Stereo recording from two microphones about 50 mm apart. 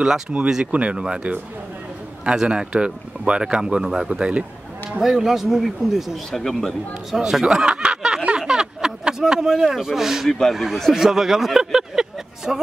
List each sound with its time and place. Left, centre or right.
0.3 s speech: centre
2.3 s speech: centre
4.9 s speech: centre
6.4 s speech: centre
7.2 s speech: centre
10.2 s speech: centre
10.5 s speech: centre